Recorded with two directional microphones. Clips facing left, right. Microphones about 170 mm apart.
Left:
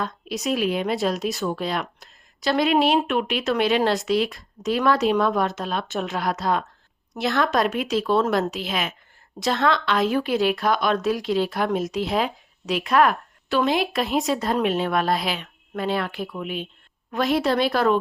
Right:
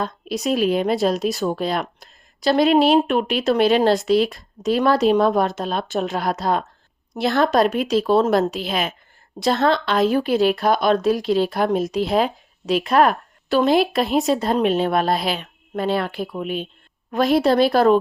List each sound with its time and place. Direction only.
0.0 s a woman's voice: 35° right (ahead or behind)